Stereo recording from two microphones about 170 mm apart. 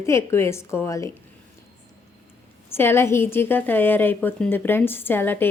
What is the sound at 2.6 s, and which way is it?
A woman's voice, 15° left (ahead or behind).